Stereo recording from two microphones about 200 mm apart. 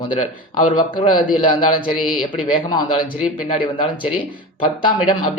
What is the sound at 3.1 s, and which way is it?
Speech, 5° right (ahead or behind).